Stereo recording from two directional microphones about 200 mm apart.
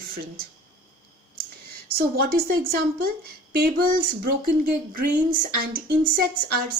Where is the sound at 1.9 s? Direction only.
50° right (ahead or behind).